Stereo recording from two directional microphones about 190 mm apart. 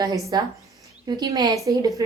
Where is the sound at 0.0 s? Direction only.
20° right (ahead or behind).